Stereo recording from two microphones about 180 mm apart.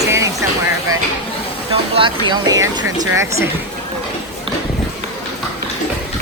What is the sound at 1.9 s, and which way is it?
Speech, 25° right (ahead or behind).